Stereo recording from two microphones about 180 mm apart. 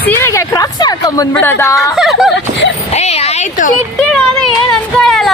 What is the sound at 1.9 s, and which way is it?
Speech, centre (ahead or behind).